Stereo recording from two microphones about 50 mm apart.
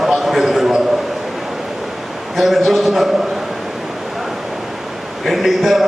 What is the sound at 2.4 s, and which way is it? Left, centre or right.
Speech, centre.